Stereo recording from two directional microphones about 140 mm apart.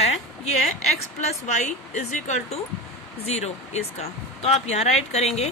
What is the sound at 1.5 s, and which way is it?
Speech, 55° left (ahead or behind).